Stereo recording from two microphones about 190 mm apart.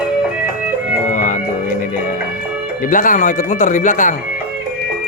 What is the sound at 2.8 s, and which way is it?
Speech, 45° left (ahead or behind).